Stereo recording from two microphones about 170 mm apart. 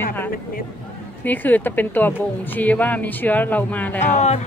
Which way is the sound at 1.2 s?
10° left (ahead or behind).